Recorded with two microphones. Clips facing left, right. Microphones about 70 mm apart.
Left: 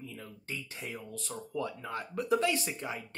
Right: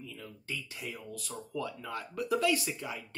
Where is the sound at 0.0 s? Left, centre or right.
Left.